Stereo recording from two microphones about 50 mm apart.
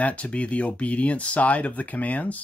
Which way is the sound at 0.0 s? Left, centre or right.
Left.